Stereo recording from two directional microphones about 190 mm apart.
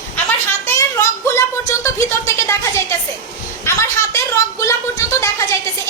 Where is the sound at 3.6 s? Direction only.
15° left (ahead or behind).